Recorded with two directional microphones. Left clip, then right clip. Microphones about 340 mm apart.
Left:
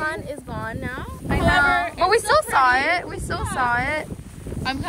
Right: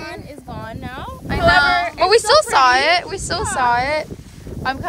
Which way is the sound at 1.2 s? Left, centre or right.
Centre.